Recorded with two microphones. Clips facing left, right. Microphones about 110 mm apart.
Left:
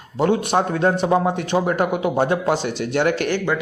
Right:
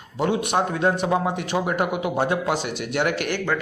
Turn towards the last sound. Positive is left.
turn(degrees=30)  # may be behind; listen again after turning